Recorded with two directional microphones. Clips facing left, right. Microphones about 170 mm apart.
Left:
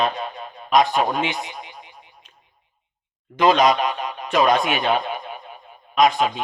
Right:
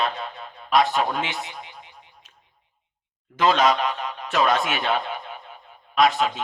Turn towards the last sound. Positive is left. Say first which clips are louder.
# left 2 dB
turn(degrees=15)  # may be behind; listen again after turning